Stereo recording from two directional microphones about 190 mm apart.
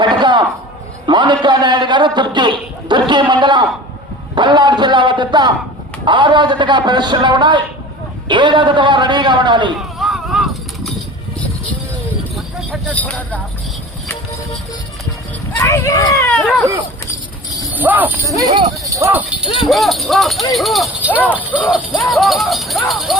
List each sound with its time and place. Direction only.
0.0 s a sound: 25° right (ahead or behind)
1.0 s a man's voice: 25° right (ahead or behind)
10.0 s a sound: centre (ahead or behind)
12.5 s speech: 5° left (ahead or behind)
15.5 s speech: 15° left (ahead or behind)
16.3 s speech: centre (ahead or behind)
17.7 s speech: 10° right (ahead or behind)
18.3 s speech: 20° right (ahead or behind)
19.7 s speech: centre (ahead or behind)